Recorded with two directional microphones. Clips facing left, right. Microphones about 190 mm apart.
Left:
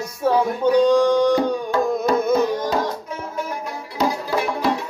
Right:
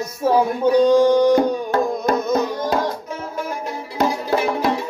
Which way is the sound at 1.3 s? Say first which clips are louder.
Right 2 dB; 50° right (ahead or behind).